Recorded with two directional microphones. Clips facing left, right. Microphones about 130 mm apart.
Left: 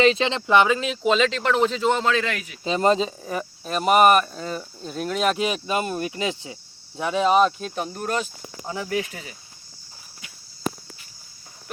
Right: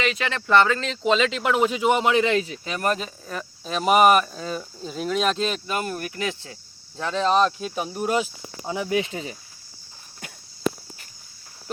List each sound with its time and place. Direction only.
0.0 s speech: 30° left (ahead or behind)
1.0 s speech: centre (ahead or behind); by 2.6 s 25° right (ahead or behind)
2.6 s speech: 25° left (ahead or behind)
3.6 s speech: 5° left (ahead or behind); by 9.3 s 25° right (ahead or behind)